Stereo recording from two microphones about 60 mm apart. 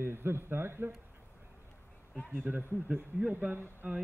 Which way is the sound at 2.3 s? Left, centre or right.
Right.